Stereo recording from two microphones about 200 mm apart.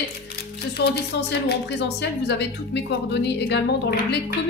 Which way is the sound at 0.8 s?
55° left (ahead or behind).